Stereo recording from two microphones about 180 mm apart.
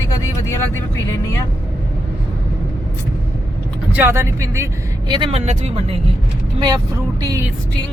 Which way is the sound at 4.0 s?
15° right (ahead or behind).